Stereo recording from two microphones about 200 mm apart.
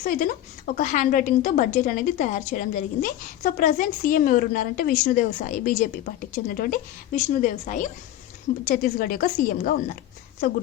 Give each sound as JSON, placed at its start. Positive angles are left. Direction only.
{"t": 0.0, "sound": "a woman's voice", "side_deg": 40}